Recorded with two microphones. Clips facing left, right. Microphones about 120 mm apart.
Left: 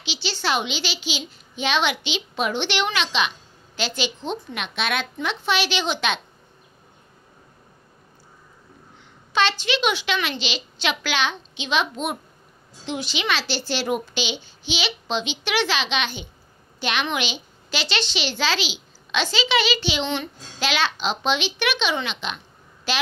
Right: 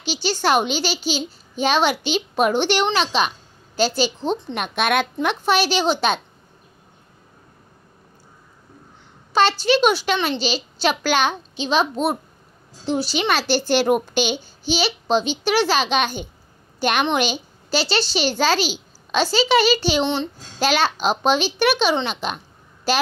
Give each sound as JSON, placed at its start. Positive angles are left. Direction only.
{"t": 0.0, "sound": "a child's voice", "side_deg": -45}
{"t": 4.6, "sound": "a child's voice", "side_deg": -50}
{"t": 9.3, "sound": "a child's voice", "side_deg": -40}